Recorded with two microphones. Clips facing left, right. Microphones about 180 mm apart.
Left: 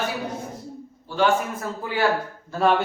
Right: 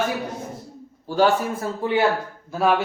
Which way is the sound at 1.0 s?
40° right (ahead or behind).